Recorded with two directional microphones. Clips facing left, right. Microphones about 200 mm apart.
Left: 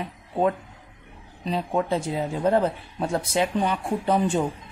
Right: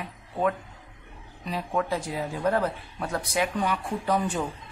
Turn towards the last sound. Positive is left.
turn(degrees=25)  # may be behind; listen again after turning